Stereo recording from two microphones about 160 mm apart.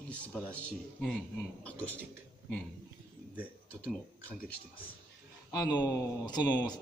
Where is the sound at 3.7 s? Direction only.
10° left (ahead or behind).